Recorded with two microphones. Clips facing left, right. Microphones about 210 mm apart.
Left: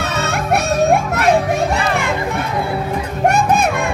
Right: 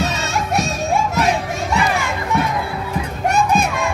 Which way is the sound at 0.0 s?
60° left (ahead or behind).